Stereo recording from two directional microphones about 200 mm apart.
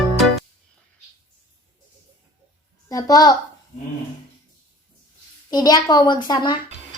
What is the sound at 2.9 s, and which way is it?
Speech, 15° left (ahead or behind).